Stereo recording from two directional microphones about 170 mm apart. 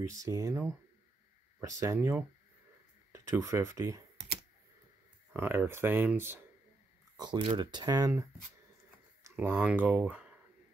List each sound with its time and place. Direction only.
0.0 s speech: 20° right (ahead or behind)
5.3 s speech: 10° right (ahead or behind)
7.2 s speech: 25° right (ahead or behind); by 10.2 s 10° right (ahead or behind)